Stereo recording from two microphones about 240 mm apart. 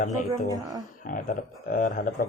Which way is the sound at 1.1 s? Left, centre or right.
Left.